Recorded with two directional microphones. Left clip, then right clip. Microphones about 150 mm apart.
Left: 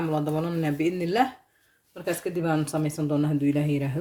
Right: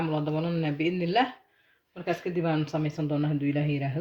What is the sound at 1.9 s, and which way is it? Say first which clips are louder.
Speech: left 1 dB; 90° left.